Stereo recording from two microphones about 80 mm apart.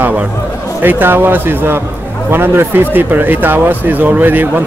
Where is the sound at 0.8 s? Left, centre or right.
Right.